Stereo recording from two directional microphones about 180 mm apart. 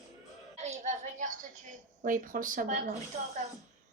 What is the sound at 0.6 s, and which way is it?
Music, 40° right (ahead or behind).